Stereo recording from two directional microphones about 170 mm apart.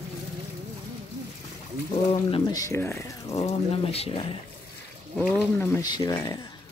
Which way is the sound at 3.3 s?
35° left (ahead or behind).